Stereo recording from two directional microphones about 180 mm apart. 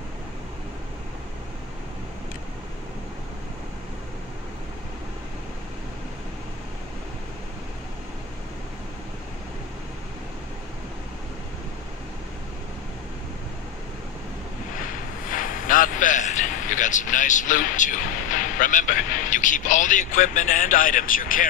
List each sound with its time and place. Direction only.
14.8 s a man's voice: 50° left (ahead or behind)